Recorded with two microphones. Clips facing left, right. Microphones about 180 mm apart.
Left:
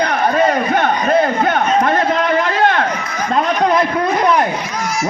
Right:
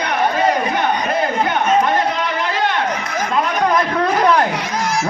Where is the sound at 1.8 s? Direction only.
55° left (ahead or behind).